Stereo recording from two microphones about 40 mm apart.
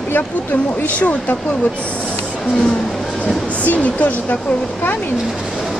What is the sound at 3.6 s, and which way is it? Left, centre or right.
Speech, left.